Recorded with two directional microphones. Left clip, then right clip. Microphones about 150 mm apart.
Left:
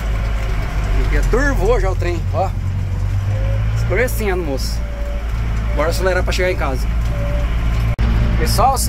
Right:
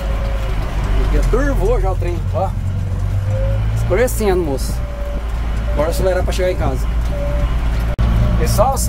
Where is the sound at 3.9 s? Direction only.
30° right (ahead or behind).